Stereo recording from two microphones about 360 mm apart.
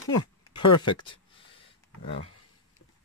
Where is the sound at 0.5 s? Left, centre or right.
Left.